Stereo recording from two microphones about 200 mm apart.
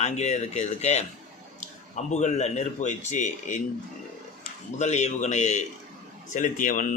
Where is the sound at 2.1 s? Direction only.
35° left (ahead or behind).